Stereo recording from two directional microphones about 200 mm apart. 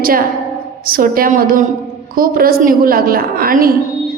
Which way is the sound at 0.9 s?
45° right (ahead or behind).